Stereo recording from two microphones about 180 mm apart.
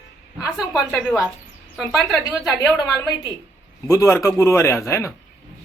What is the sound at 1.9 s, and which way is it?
A woman's voice, 10° left (ahead or behind).